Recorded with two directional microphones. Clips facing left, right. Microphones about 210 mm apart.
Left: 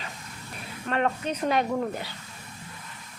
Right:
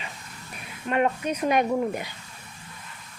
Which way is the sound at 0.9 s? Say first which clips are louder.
Right 3 dB; 10° right (ahead or behind).